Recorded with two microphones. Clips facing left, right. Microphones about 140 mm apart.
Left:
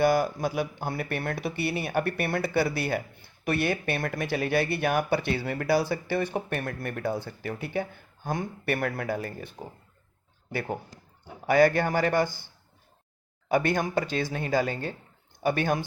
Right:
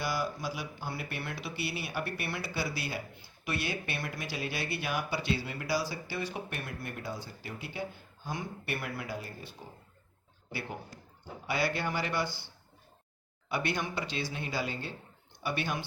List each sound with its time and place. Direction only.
0.0 s speech: 55° left (ahead or behind)
13.5 s speech: 45° left (ahead or behind)